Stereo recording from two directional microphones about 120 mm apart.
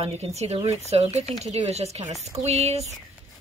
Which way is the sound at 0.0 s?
65° right (ahead or behind).